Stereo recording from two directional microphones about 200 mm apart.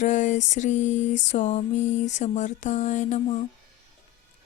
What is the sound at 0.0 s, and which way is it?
Mantra, 35° left (ahead or behind).